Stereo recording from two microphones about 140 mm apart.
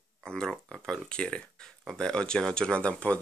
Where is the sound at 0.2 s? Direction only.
5° left (ahead or behind).